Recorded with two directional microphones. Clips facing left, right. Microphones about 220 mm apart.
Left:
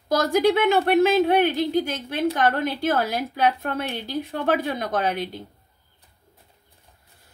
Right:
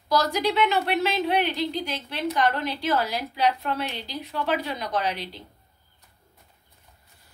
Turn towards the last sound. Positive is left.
turn(degrees=50)  # may be behind; listen again after turning